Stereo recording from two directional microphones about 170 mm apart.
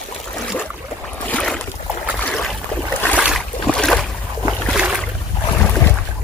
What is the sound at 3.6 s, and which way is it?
Boat, 5° left (ahead or behind).